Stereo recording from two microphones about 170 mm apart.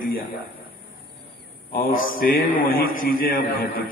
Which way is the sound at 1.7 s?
60° left (ahead or behind).